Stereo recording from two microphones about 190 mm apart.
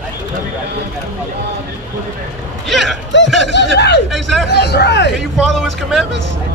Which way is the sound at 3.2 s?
Centre (ahead or behind).